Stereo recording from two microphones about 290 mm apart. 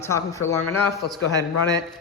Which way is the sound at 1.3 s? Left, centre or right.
Centre.